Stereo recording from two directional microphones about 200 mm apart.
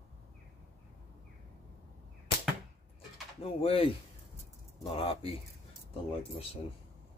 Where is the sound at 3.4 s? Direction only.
30° left (ahead or behind).